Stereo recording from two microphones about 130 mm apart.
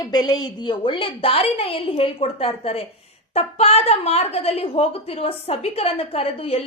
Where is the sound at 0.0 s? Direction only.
30° left (ahead or behind).